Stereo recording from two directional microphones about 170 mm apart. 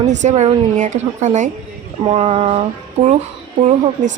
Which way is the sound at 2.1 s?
30° right (ahead or behind).